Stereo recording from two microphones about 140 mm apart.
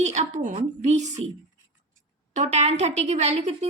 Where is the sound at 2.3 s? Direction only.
55° right (ahead or behind).